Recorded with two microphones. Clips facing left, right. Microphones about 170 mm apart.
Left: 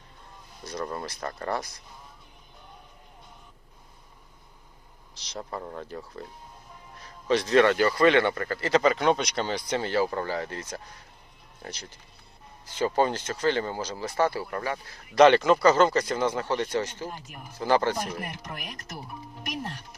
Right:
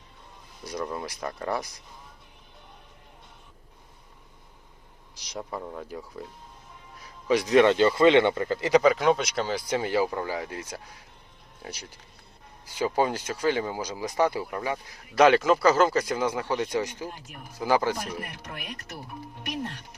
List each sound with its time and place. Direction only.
0.6 s speech: 10° right (ahead or behind)
5.1 s speech: 10° right (ahead or behind)
8.8 s speech: 5° right (ahead or behind)
15.1 s speech: 5° right (ahead or behind)